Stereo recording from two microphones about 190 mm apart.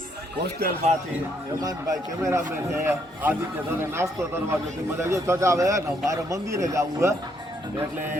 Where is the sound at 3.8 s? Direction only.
15° right (ahead or behind).